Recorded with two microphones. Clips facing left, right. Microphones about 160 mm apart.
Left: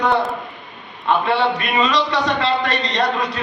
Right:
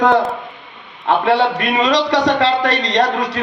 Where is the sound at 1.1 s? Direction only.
85° right.